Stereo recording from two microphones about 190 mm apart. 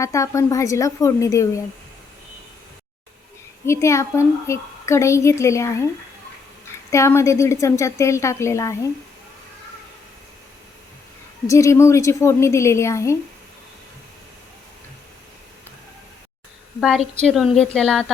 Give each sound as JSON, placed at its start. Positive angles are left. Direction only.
{"t": 0.0, "sound": "a woman's voice", "side_deg": 15}
{"t": 3.7, "sound": "a woman's voice", "side_deg": 15}
{"t": 6.9, "sound": "a woman's voice", "side_deg": 15}
{"t": 11.4, "sound": "a woman's voice", "side_deg": 15}
{"t": 16.8, "sound": "a woman's voice", "side_deg": 0}